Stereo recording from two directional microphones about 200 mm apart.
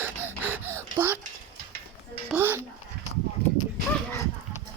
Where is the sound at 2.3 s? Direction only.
10° right (ahead or behind).